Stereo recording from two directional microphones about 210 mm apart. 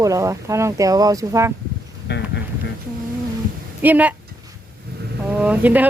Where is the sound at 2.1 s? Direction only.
55° left (ahead or behind).